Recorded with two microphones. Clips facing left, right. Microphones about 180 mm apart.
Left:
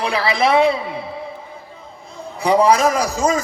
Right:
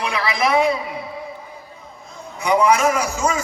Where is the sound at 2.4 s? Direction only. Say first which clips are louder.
Left 2 dB; 35° left (ahead or behind).